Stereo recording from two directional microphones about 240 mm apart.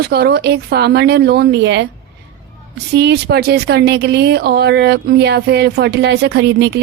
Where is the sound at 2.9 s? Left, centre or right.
Right.